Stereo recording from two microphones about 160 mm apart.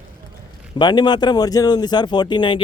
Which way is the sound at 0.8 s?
25° left (ahead or behind).